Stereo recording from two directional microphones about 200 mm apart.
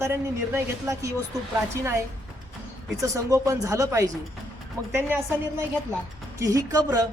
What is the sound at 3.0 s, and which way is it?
A woman's voice, 15° right (ahead or behind).